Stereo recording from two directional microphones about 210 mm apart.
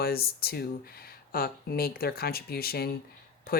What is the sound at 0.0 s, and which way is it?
Speech, 45° left (ahead or behind).